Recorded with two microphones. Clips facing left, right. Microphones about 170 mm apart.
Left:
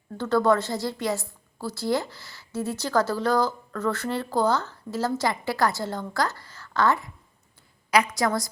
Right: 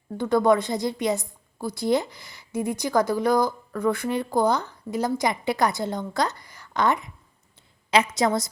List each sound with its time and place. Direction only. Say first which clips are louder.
0.2 s a woman's voice: right 2 dB; 15° right (ahead or behind)